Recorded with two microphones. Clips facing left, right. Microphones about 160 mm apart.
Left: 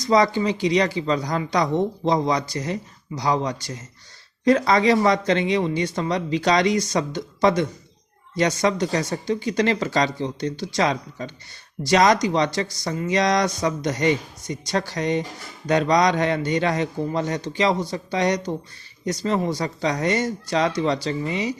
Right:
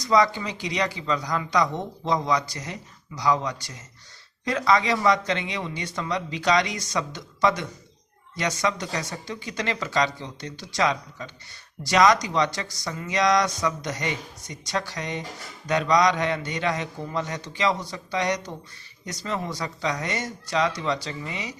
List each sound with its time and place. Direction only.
0.1 s speech: 30° left (ahead or behind)